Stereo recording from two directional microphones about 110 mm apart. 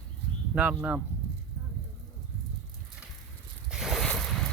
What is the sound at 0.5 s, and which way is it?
Speech, 10° right (ahead or behind).